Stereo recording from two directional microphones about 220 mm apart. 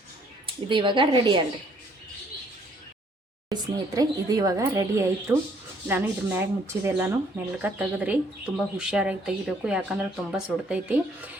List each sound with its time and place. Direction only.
0.4 s speech: 20° right (ahead or behind)
3.5 s speech: 20° right (ahead or behind)